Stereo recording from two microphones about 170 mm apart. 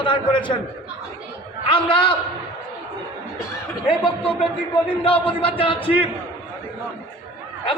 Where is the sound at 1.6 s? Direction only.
30° left (ahead or behind).